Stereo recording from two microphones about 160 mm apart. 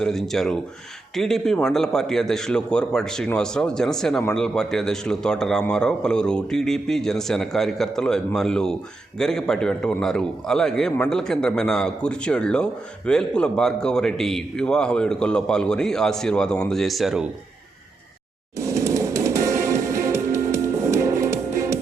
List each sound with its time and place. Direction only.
0.0 s a man's voice: 5° left (ahead or behind)
18.5 s music: 20° right (ahead or behind)